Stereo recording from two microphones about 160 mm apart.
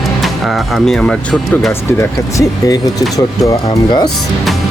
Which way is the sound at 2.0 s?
20° left (ahead or behind).